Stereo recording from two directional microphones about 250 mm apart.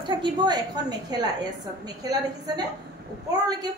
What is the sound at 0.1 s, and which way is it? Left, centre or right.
A woman's voice, centre.